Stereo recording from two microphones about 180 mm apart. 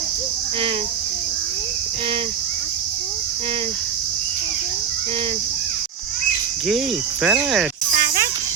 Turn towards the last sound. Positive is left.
turn(degrees=0)  # may be behind; listen again after turning